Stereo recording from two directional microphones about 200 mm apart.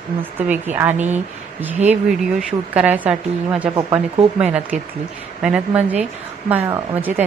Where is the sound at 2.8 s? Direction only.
5° right (ahead or behind).